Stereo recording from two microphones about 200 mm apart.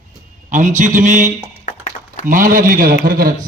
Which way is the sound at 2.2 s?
40° right (ahead or behind).